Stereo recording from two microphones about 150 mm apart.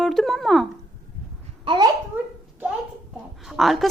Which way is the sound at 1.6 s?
35° right (ahead or behind).